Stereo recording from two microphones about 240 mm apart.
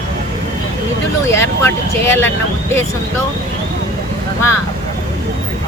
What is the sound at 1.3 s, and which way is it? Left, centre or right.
Speech, centre.